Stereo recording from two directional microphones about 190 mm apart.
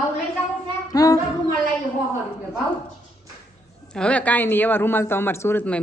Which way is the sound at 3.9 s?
5° left (ahead or behind).